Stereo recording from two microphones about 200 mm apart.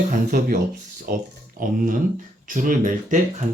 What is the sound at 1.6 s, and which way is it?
Speech, 45° right (ahead or behind).